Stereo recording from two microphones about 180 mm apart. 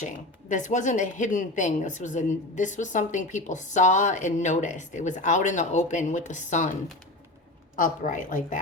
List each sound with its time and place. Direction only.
0.0 s speech: 45° left (ahead or behind)
7.8 s speech: 45° left (ahead or behind)